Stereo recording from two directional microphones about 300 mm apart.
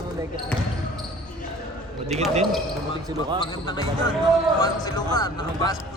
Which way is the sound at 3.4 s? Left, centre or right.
Centre.